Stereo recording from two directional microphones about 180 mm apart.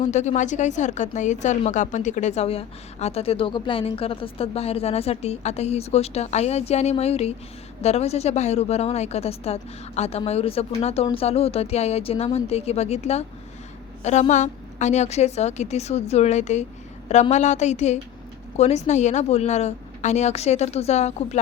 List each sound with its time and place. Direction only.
0.0 s speech: 40° left (ahead or behind)